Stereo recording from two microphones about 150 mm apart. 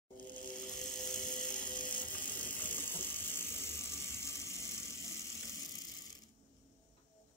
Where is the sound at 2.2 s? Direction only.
10° left (ahead or behind).